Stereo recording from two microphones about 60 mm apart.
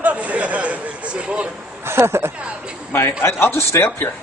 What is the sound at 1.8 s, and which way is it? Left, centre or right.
Speech, right.